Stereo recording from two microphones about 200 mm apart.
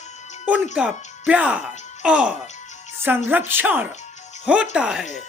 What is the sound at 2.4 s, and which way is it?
Music, 35° left (ahead or behind).